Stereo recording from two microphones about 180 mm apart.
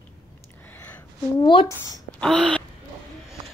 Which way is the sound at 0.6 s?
10° left (ahead or behind).